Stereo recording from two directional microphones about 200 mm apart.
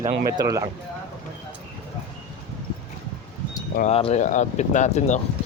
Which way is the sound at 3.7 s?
30° left (ahead or behind).